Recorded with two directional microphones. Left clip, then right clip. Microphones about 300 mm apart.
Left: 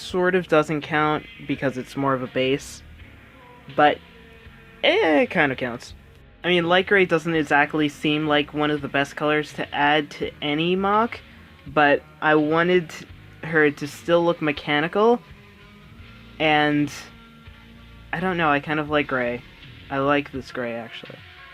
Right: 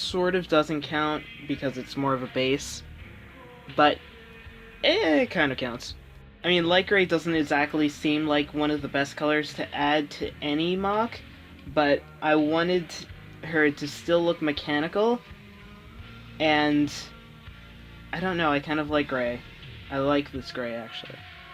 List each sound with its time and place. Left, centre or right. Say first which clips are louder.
0.0 s speech: left 4 dB; centre
16.4 s speech: left 3 dB; centre
18.1 s speech: left 4 dB; centre